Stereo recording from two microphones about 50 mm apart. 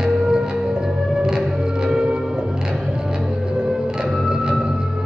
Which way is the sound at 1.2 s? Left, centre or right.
Centre.